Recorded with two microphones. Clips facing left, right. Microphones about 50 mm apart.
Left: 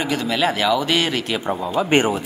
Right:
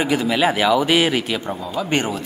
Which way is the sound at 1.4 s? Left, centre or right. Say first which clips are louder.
Left 4 dB; centre.